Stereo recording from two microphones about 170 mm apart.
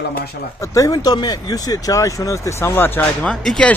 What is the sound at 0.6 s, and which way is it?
Speech, 20° left (ahead or behind).